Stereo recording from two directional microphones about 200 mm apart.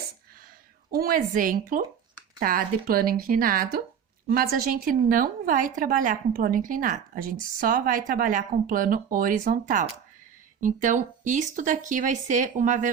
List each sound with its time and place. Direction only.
0.9 s a woman's voice: 50° right (ahead or behind)